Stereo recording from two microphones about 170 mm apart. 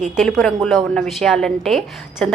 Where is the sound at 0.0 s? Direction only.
Centre (ahead or behind).